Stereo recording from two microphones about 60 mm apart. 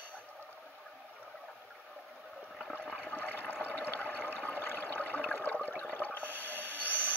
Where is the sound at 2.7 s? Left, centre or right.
Left.